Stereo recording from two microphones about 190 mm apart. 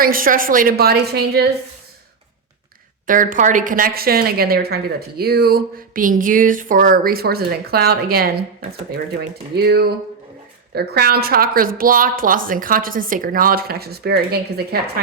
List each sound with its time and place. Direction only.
0.0 s a woman's voice: 50° right (ahead or behind)
3.1 s a woman's voice: 45° right (ahead or behind)
9.6 s a woman's voice: 55° right (ahead or behind)